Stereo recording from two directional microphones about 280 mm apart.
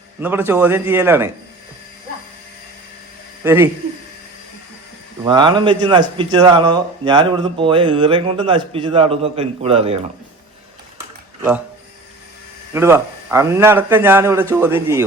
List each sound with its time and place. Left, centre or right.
0.2 s speech: centre
3.4 s a man's voice: centre
5.2 s speech: centre
12.7 s speech: centre